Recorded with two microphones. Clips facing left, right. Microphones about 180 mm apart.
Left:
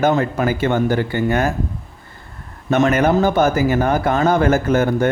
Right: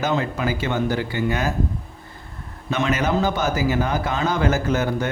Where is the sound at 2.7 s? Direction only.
50° left (ahead or behind).